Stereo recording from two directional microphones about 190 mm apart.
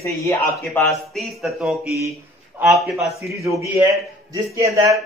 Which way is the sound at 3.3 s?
15° right (ahead or behind).